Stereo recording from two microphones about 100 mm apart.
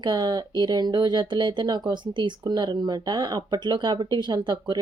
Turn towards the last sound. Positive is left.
turn(degrees=-45)  # may be behind; listen again after turning